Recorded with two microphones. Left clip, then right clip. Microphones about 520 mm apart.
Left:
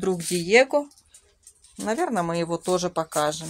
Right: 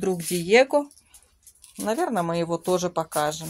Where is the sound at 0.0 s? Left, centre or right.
Right.